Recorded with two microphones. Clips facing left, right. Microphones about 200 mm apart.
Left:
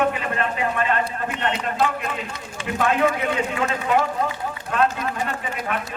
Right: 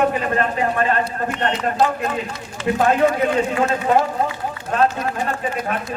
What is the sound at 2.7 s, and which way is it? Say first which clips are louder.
A man's voice: right 3 dB; 35° right (ahead or behind).